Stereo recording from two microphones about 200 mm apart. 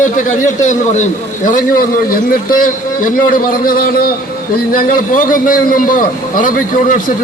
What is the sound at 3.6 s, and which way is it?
A man's voice, 45° left (ahead or behind).